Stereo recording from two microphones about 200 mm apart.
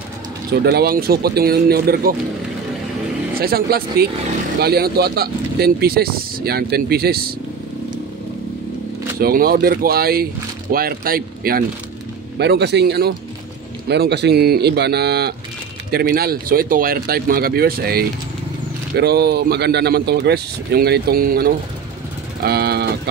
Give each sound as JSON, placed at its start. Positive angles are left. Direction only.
{"t": 0.7, "sound": "speech", "side_deg": -50}
{"t": 3.3, "sound": "speech", "side_deg": -50}
{"t": 9.2, "sound": "speech", "side_deg": -50}
{"t": 12.4, "sound": "speech", "side_deg": -60}